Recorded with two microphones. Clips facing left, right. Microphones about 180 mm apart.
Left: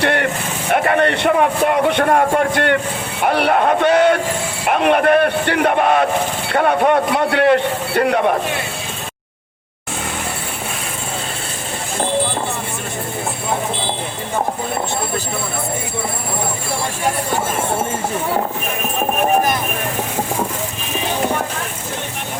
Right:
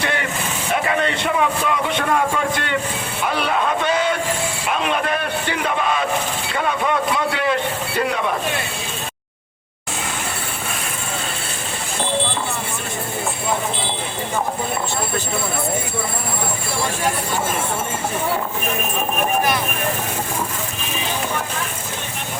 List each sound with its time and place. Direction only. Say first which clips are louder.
0.0 s vehicle: left 6 dB; 60° left (ahead or behind)
0.7 s a man's voice: left 6 dB; 60° left (ahead or behind)